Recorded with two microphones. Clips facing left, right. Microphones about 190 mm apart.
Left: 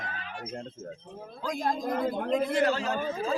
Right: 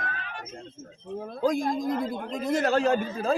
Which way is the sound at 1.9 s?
55° left (ahead or behind).